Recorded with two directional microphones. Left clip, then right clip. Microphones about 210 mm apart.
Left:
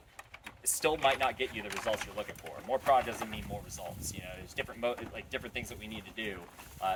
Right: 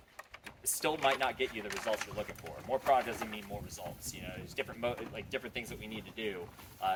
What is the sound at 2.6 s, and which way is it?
Speech, 15° left (ahead or behind).